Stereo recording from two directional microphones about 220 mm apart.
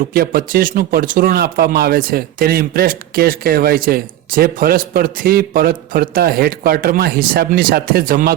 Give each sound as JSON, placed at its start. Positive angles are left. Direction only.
{"t": 0.1, "sound": "speech", "side_deg": -40}